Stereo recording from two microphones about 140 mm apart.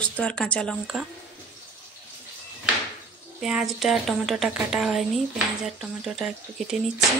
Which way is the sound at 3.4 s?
5° right (ahead or behind).